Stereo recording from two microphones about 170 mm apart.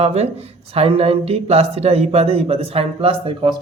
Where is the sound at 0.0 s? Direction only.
40° right (ahead or behind).